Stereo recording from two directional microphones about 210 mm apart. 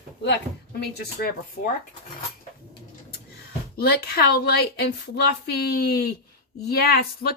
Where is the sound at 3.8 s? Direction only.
50° left (ahead or behind).